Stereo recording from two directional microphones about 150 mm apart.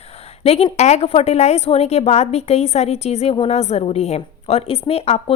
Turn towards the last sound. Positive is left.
turn(degrees=45)  # may be behind; listen again after turning